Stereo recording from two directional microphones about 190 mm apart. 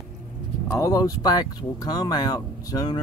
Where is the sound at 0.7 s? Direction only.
15° left (ahead or behind).